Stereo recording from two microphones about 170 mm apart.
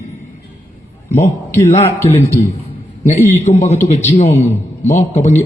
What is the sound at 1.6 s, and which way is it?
Speech, 40° left (ahead or behind).